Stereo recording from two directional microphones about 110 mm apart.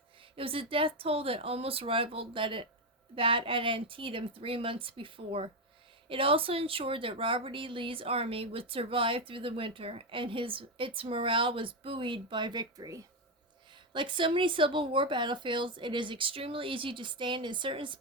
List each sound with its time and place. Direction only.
0.3 s a woman's voice: 55° right (ahead or behind); by 13.0 s 35° right (ahead or behind)
13.9 s a woman's voice: 45° right (ahead or behind)